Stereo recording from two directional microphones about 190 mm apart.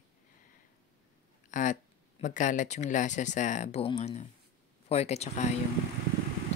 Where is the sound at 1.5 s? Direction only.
40° left (ahead or behind).